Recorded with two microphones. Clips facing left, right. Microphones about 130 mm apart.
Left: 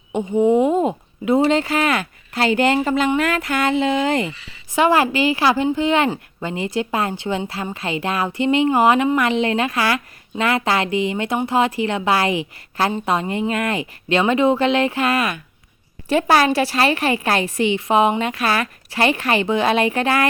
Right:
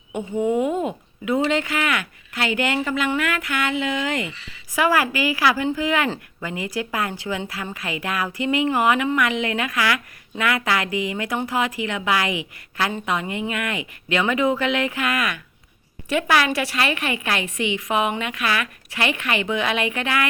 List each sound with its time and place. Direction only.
0.1 s a woman's voice: 20° left (ahead or behind)